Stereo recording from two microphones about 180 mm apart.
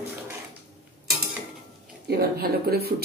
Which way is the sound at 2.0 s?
60° right (ahead or behind).